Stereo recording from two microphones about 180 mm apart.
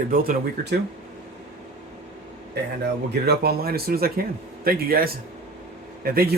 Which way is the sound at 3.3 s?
60° right (ahead or behind).